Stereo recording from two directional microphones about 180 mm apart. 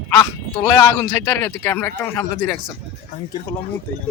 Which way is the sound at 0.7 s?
15° left (ahead or behind).